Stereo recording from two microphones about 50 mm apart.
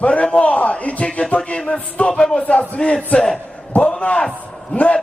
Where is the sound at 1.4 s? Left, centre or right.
Centre.